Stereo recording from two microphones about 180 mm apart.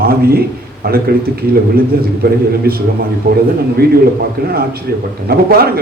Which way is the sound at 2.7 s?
55° right (ahead or behind).